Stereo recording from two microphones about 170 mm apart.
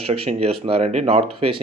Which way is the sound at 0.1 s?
35° right (ahead or behind).